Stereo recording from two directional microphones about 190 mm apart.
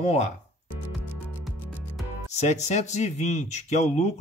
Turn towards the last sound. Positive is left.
turn(degrees=35)  # may be behind; listen again after turning